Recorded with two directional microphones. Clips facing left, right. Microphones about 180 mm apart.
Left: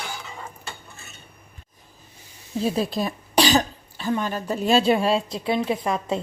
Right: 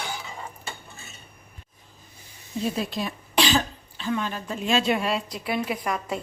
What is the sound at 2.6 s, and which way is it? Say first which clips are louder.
Speech: left 4 dB; 35° left (ahead or behind).